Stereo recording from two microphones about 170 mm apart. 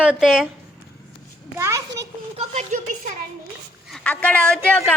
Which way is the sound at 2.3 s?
45° right (ahead or behind).